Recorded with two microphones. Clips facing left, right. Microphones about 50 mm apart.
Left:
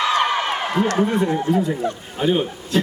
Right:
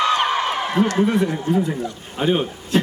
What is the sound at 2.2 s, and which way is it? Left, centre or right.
Speech, right.